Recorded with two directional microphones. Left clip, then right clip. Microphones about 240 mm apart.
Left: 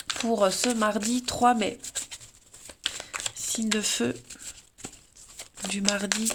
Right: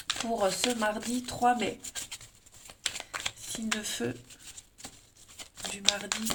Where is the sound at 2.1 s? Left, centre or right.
Centre.